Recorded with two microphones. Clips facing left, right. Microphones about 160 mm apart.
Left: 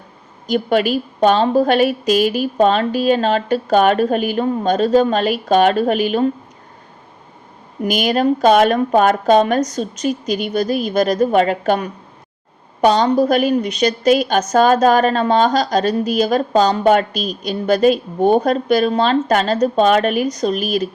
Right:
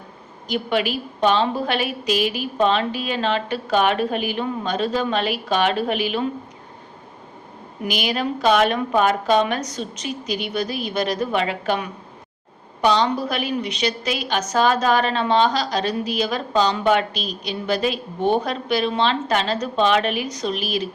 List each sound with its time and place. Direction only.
0.4 s a woman's voice: 45° left (ahead or behind)
7.9 s a woman's voice: 45° left (ahead or behind)